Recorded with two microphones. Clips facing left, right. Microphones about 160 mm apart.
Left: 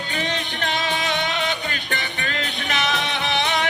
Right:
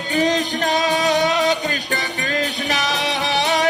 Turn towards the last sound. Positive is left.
turn(degrees=-35)  # may be behind; listen again after turning